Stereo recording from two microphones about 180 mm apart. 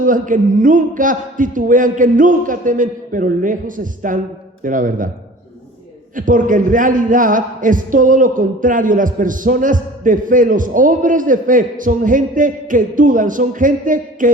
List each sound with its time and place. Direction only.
0.0 s a man's voice: 45° right (ahead or behind)
6.1 s a man's voice: 45° right (ahead or behind)